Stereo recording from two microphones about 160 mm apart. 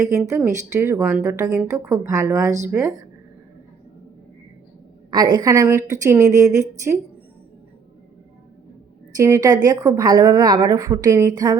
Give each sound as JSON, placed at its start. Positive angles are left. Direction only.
{"t": 0.3, "sound": "a woman's voice", "side_deg": -20}
{"t": 5.1, "sound": "a woman's voice", "side_deg": -25}
{"t": 9.1, "sound": "a woman's voice", "side_deg": -20}